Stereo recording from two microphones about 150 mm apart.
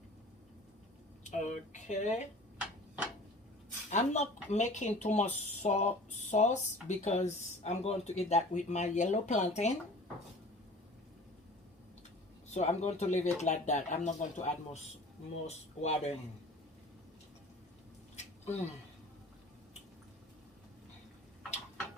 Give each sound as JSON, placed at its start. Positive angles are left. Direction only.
{"t": 1.2, "sound": "speech", "side_deg": 55}
{"t": 3.8, "sound": "speech", "side_deg": 50}
{"t": 12.5, "sound": "speech", "side_deg": 50}
{"t": 18.2, "sound": "a sound", "side_deg": 50}